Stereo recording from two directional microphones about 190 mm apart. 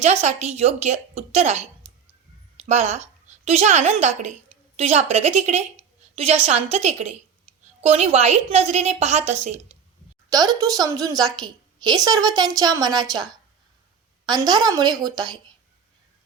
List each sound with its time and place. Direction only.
0.0 s a woman's voice: 35° right (ahead or behind)
10.2 s a woman's voice: 20° right (ahead or behind)
14.3 s a woman's voice: 20° right (ahead or behind)